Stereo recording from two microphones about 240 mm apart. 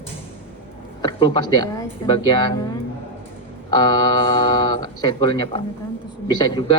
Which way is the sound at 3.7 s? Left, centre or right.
Centre.